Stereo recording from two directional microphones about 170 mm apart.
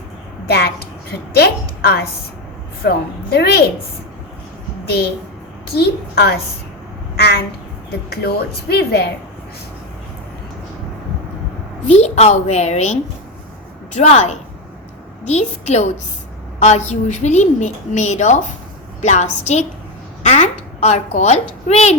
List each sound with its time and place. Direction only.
0.4 s a woman's voice: 70° left (ahead or behind)
5.7 s a woman's voice: 70° left (ahead or behind)
11.9 s a woman's voice: 40° left (ahead or behind)